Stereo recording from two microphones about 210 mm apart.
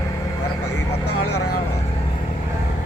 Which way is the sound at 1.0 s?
90° left.